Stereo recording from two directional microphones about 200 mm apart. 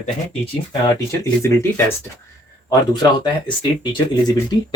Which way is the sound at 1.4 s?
15° left (ahead or behind).